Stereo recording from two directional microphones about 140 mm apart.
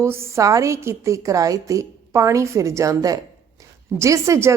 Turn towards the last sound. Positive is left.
turn(degrees=-20)  # may be behind; listen again after turning